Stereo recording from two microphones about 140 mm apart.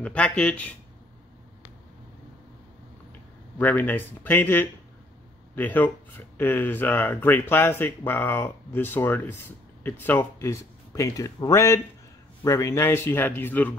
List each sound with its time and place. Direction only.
0.0 s speech: 10° left (ahead or behind)
3.5 s speech: 10° left (ahead or behind)